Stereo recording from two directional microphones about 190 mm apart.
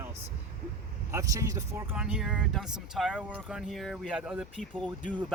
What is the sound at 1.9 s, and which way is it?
Speech, 5° right (ahead or behind).